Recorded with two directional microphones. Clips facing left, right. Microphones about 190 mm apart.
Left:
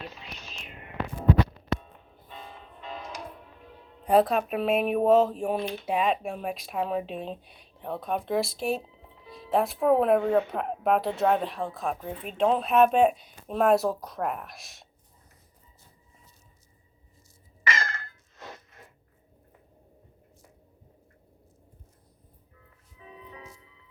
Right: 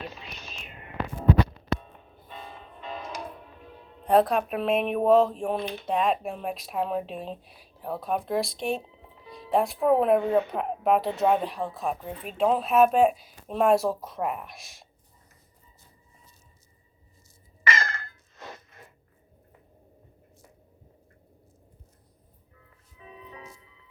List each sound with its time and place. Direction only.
2.8 s music: 60° right (ahead or behind)
4.0 s speech: 5° left (ahead or behind)
17.6 s a sound: 65° right (ahead or behind)